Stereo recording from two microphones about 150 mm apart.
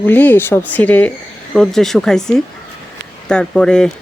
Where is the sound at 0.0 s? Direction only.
10° left (ahead or behind).